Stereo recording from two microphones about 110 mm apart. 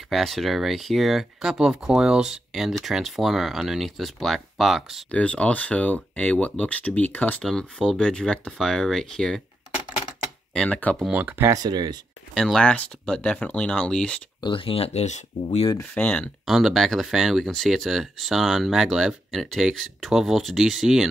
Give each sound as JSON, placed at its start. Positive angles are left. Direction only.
{"t": 0.1, "sound": "speech", "side_deg": 0}
{"t": 5.1, "sound": "speech", "side_deg": 10}
{"t": 7.4, "sound": "speech", "side_deg": 5}
{"t": 10.5, "sound": "speech", "side_deg": 10}
{"t": 11.0, "sound": "speech", "side_deg": -15}
{"t": 11.5, "sound": "speech", "side_deg": -40}
{"t": 12.4, "sound": "speech", "side_deg": 5}
{"t": 14.4, "sound": "speech", "side_deg": 50}
{"t": 15.8, "sound": "speech", "side_deg": 10}
{"t": 16.4, "sound": "speech", "side_deg": 0}